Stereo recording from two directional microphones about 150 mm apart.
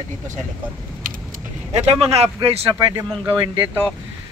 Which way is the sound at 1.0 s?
65° right (ahead or behind).